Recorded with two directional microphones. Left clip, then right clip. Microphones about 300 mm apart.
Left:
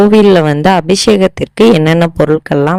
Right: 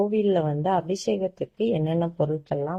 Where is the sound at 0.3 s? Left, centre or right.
Left.